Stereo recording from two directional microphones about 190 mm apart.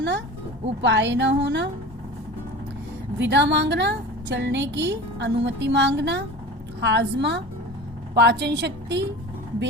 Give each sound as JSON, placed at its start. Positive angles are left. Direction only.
{"t": 0.8, "sound": "a woman's voice", "side_deg": -70}
{"t": 3.2, "sound": "a woman's voice", "side_deg": -65}